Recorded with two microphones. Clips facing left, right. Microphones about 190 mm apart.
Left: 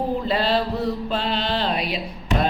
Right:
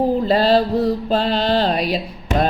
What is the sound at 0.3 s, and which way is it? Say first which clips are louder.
Mantra: right 6 dB; 40° right (ahead or behind).